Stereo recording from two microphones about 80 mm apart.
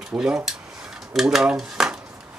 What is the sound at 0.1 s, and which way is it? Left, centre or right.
Speech, centre.